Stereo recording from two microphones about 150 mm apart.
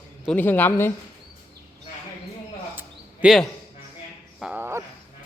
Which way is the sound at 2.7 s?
10° right (ahead or behind).